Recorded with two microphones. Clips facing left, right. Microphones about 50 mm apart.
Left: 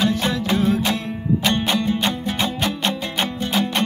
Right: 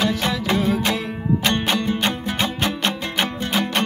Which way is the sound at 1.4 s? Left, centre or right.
Right.